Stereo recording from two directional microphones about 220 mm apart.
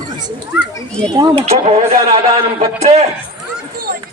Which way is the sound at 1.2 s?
25° right (ahead or behind).